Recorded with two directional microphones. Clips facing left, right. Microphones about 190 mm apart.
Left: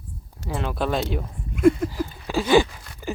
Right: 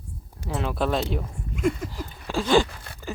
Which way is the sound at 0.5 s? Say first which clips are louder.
Even; centre (ahead or behind).